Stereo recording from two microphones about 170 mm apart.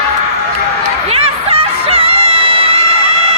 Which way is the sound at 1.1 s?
35° right (ahead or behind).